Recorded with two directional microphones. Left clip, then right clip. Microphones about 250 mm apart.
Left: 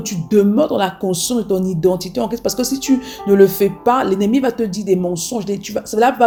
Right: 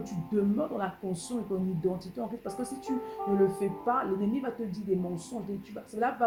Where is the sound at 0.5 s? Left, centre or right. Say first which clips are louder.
Left 16 dB; left.